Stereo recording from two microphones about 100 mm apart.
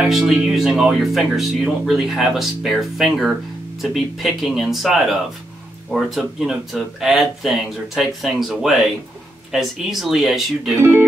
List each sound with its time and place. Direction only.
0.0 s speech: 5° right (ahead or behind)